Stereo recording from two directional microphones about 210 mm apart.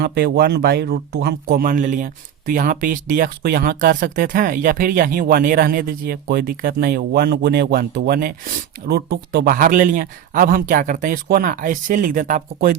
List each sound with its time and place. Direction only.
0.0 s speech: 50° right (ahead or behind)